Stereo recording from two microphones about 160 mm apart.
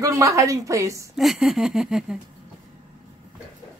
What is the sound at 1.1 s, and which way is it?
Speech, centre (ahead or behind).